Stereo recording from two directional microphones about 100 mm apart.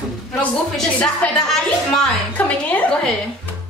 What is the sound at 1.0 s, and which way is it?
A woman's voice, 5° left (ahead or behind).